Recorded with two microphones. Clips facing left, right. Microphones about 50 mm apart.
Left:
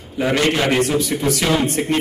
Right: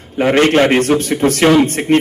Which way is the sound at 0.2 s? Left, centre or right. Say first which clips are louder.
Right 7 dB; right.